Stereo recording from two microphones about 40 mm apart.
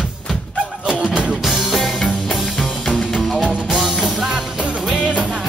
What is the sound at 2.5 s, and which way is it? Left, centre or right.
Music, centre.